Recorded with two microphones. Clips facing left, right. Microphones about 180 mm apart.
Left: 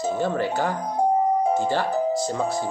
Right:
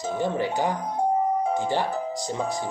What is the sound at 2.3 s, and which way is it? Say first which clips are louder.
Speech: left 3 dB; 15° right (ahead or behind).